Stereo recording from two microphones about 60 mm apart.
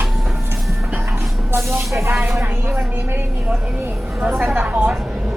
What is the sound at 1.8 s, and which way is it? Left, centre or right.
Speech, centre.